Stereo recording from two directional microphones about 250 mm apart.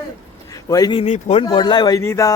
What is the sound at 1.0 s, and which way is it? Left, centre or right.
Speech, left.